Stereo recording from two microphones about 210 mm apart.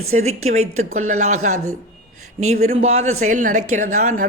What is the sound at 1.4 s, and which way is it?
Speech, 35° right (ahead or behind).